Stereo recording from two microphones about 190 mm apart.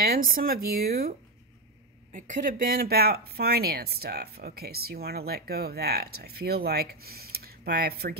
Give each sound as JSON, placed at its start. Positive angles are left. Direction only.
{"t": 0.0, "sound": "speech", "side_deg": -50}
{"t": 2.1, "sound": "speech", "side_deg": -40}